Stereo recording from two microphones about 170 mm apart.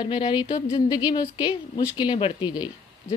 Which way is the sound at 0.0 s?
25° left (ahead or behind).